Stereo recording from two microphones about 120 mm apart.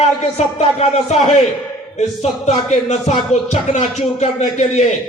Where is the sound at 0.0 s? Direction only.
65° left (ahead or behind).